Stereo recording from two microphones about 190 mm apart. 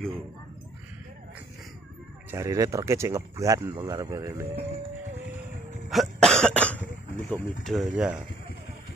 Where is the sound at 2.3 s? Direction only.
15° right (ahead or behind).